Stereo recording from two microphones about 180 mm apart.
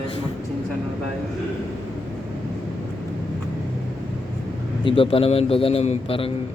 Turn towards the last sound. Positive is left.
turn(degrees=30)  # may be behind; listen again after turning